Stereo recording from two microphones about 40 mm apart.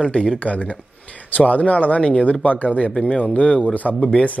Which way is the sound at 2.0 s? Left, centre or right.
Left.